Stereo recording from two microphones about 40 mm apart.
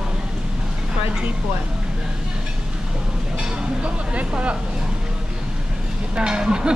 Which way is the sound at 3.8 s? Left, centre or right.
Right.